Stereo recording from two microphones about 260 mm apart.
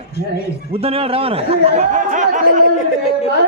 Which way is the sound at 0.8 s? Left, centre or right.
Right.